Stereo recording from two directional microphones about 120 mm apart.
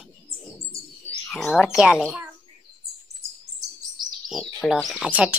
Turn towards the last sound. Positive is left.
turn(degrees=-10)  # may be behind; listen again after turning